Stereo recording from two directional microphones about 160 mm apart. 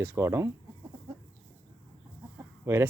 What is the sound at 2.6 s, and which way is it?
Speech, 15° right (ahead or behind).